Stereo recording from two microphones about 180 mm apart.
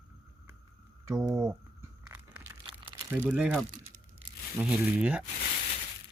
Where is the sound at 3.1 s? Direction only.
15° right (ahead or behind).